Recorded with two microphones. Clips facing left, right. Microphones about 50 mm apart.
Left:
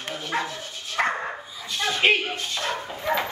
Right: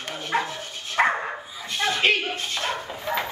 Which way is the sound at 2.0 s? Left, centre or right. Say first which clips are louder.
Left 2 dB; left.